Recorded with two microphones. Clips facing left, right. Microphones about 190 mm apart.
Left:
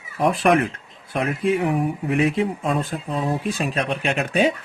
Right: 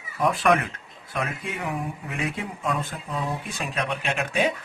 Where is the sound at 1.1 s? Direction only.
30° left (ahead or behind).